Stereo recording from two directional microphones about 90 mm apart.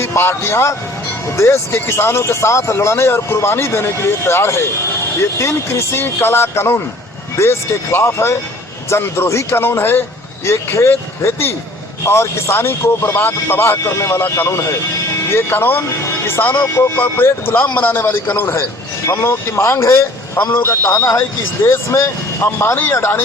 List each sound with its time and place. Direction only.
0.0 s a man's voice: 30° left (ahead or behind)
16.7 s speech: 30° left (ahead or behind)
20.9 s speech: 40° left (ahead or behind)
21.6 s speech: 30° left (ahead or behind)